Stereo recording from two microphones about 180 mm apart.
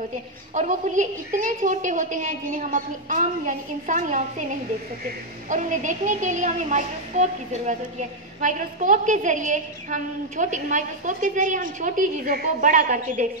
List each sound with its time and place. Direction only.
0.6 s a woman's voice: 45° right (ahead or behind)